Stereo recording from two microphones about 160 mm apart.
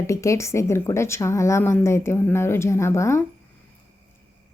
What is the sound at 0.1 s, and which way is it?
Speech, 20° left (ahead or behind).